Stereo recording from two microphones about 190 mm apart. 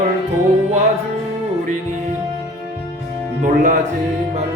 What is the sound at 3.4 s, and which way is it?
Speech, 45° right (ahead or behind).